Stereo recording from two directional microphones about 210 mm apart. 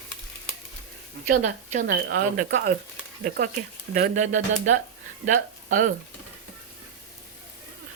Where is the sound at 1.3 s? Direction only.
40° right (ahead or behind).